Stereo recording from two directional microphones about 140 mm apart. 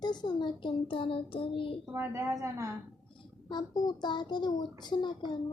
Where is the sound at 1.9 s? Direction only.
20° right (ahead or behind).